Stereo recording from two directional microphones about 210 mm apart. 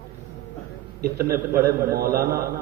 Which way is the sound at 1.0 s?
45° right (ahead or behind).